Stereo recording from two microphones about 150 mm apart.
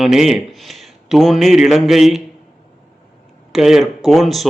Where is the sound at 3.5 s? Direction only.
Centre (ahead or behind).